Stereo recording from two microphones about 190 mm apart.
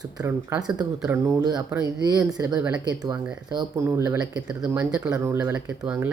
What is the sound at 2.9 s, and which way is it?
Speech, 20° right (ahead or behind).